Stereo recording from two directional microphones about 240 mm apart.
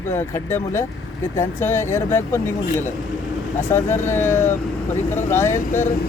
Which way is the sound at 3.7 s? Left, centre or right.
Centre.